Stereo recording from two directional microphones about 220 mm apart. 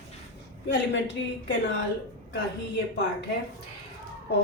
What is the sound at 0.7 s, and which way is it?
Speech, 55° left (ahead or behind).